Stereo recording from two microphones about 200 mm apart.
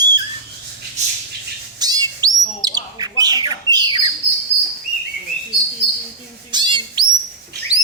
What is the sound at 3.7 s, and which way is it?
Squawk, 20° right (ahead or behind).